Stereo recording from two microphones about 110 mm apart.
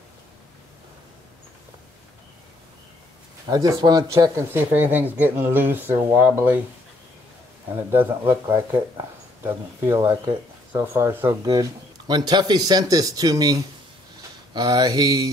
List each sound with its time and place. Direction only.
3.4 s speech: 30° right (ahead or behind); by 6.6 s 15° right (ahead or behind)
7.9 s speech: 20° right (ahead or behind)
12.1 s speech: 40° right (ahead or behind)